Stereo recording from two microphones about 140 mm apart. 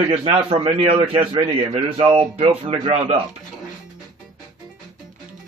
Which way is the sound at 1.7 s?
40° right (ahead or behind).